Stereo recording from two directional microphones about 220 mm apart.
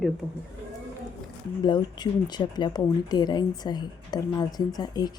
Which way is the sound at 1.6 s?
20° left (ahead or behind).